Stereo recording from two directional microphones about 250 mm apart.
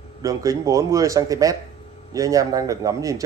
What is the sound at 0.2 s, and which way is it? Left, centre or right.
Speech, centre.